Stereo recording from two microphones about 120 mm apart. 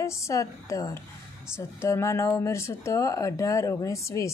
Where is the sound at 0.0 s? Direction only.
25° left (ahead or behind).